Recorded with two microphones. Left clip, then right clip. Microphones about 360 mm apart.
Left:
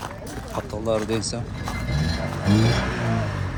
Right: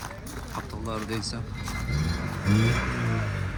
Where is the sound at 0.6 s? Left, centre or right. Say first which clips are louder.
Left 7 dB; centre.